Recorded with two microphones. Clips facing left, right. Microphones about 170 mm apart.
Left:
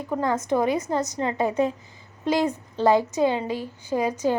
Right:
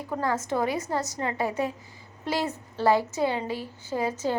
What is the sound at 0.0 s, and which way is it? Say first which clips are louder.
A woman's voice: left 3 dB; 20° left (ahead or behind).